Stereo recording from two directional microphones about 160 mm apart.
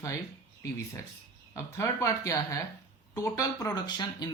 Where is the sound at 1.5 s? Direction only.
20° left (ahead or behind).